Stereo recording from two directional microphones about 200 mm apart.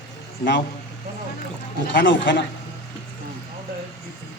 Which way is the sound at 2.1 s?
65° left (ahead or behind).